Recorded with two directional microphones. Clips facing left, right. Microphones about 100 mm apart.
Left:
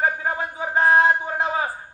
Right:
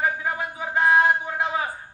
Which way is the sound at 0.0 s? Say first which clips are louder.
Left 2 dB; 30° left (ahead or behind).